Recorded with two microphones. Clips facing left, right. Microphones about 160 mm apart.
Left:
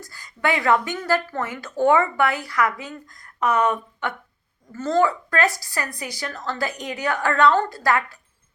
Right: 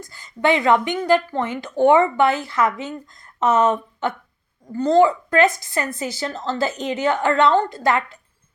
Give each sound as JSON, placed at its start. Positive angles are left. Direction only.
{"t": 0.0, "sound": "a woman's voice", "side_deg": -25}